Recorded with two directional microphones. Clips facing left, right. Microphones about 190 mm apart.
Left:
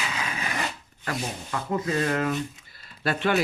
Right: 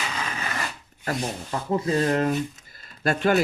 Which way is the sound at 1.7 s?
35° right (ahead or behind).